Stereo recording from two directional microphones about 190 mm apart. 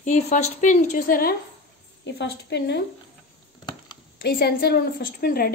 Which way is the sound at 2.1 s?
60° left (ahead or behind).